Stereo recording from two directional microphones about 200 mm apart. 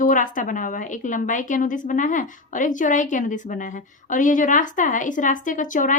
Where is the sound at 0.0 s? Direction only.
40° left (ahead or behind).